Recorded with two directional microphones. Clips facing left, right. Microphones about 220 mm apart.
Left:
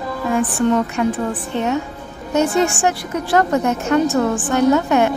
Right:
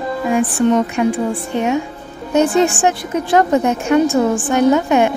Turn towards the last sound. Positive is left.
turn(degrees=-15)  # may be behind; listen again after turning